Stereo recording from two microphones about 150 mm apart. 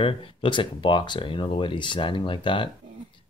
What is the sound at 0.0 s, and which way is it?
Speech, 35° left (ahead or behind).